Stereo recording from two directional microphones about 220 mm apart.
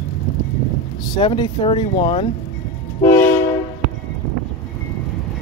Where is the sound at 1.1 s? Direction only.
20° left (ahead or behind).